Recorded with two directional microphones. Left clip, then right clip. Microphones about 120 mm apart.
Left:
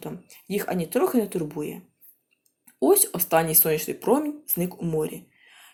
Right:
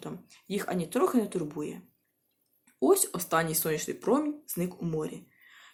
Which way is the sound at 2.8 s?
20° left (ahead or behind).